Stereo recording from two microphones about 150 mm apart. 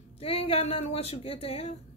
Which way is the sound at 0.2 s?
40° left (ahead or behind).